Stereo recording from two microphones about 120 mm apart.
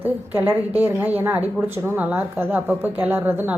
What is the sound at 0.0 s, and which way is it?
A woman's voice, 15° right (ahead or behind).